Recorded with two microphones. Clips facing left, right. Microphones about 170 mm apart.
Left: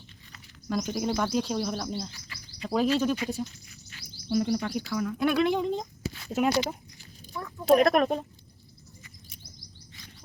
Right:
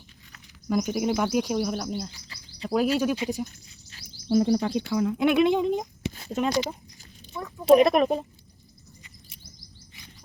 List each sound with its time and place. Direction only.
0.7 s speech: 10° right (ahead or behind)
2.0 s speech: 25° right (ahead or behind)
2.6 s speech: 10° right (ahead or behind)
3.8 s bird: 30° right (ahead or behind)
4.9 s speech: 20° right (ahead or behind)
6.3 s speech: 5° left (ahead or behind)